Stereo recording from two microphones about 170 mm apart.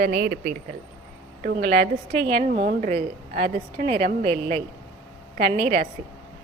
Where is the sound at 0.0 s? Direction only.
70° right (ahead or behind).